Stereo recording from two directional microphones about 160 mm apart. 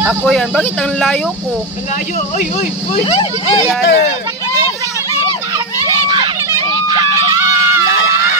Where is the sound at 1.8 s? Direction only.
50° left (ahead or behind).